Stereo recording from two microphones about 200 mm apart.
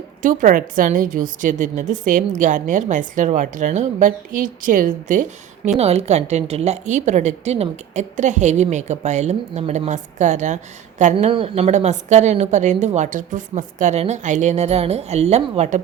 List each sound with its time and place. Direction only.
0.2 s a woman's voice: 40° right (ahead or behind)